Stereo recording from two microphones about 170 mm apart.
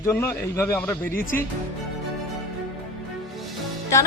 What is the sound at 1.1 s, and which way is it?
Speech, 55° left (ahead or behind).